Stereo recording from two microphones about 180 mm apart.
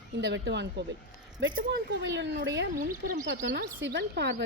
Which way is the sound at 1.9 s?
75° right (ahead or behind).